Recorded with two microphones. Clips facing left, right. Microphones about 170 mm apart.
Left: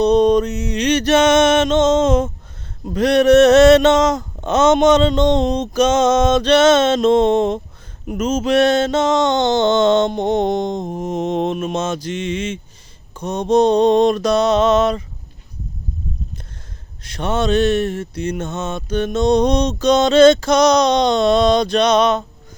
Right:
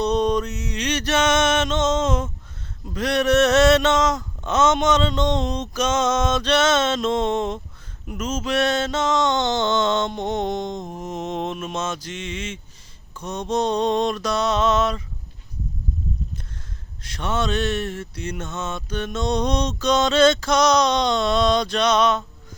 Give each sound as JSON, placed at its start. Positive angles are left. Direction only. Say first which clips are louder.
{"t": 0.0, "sound": "male singing", "louder": "left 8 dB", "side_deg": 60}
{"t": 10.8, "sound": "mantra", "louder": "left 7 dB", "side_deg": 20}
{"t": 11.0, "sound": "male singing", "louder": "left 8 dB", "side_deg": 55}
{"t": 17.0, "sound": "male singing", "louder": "left 5 dB", "side_deg": 55}